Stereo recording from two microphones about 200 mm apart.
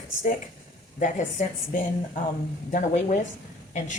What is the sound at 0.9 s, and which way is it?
A woman's voice, 40° left (ahead or behind).